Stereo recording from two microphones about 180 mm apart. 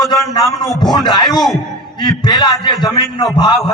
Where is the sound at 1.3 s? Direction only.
Centre (ahead or behind).